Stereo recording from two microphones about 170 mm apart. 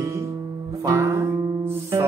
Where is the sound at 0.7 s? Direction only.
15° right (ahead or behind).